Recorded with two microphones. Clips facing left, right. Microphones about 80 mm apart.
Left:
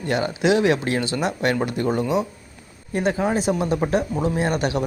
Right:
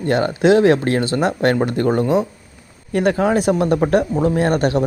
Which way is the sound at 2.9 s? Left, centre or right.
Right.